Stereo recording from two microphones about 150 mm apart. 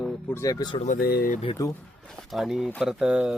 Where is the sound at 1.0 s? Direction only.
90° left.